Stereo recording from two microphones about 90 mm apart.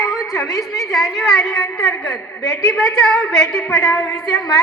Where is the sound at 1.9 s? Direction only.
35° left (ahead or behind).